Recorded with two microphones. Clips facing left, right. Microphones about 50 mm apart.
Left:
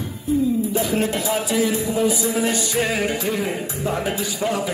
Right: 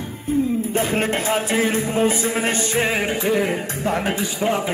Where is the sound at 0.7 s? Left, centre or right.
Right.